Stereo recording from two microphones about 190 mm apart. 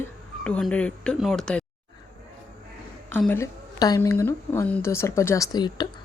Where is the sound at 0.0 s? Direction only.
5° left (ahead or behind).